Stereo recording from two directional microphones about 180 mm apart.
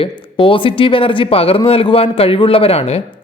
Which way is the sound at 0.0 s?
30° left (ahead or behind).